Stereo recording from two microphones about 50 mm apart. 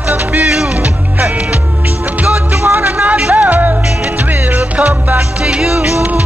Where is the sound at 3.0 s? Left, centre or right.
Right.